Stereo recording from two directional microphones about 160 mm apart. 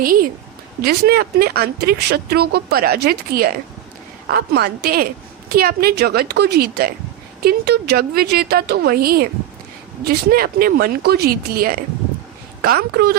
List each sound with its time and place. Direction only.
0.0 s a woman's voice: 65° right (ahead or behind)
0.8 s speech: 75° right (ahead or behind)
7.4 s speech: 85° right; by 11.8 s 65° right (ahead or behind)
12.6 s speech: 75° right (ahead or behind)